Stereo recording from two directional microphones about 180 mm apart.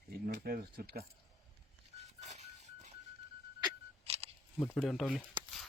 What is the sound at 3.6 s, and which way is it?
Single-lens reflex camera, 35° right (ahead or behind).